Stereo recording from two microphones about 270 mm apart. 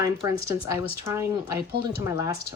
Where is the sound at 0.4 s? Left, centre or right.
Centre.